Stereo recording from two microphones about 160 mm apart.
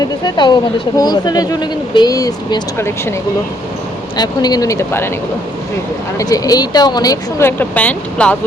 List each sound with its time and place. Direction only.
0.0 s speech: 25° left (ahead or behind)
4.2 s speech: 25° left (ahead or behind)
6.1 s speech: 20° left (ahead or behind)